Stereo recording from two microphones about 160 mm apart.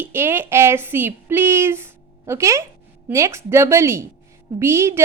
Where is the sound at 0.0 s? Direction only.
15° right (ahead or behind).